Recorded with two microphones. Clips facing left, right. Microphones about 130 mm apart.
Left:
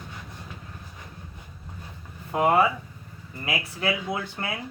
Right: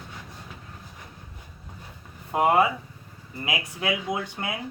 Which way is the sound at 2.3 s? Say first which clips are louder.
Even; 20° right (ahead or behind).